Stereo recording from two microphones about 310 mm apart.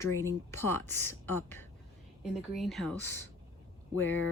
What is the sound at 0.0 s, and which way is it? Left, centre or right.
Speech, centre.